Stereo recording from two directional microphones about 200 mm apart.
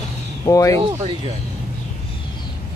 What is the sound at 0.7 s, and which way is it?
Speech, 25° right (ahead or behind).